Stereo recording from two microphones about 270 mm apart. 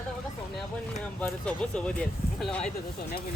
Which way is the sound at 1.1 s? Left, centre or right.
Centre.